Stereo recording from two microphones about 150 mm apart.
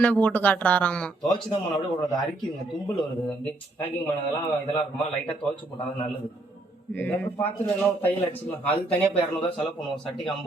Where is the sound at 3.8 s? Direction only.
10° left (ahead or behind).